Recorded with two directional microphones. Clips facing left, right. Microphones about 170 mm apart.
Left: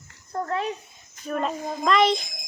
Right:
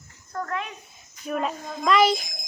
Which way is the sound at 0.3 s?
30° left (ahead or behind).